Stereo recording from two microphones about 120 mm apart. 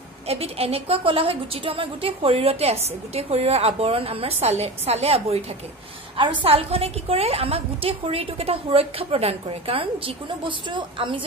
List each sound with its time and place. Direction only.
0.3 s a woman's voice: 55° right (ahead or behind)
6.1 s a woman's voice: 45° right (ahead or behind)